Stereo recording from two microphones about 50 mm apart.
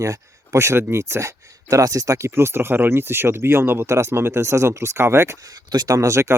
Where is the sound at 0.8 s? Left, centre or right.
Right.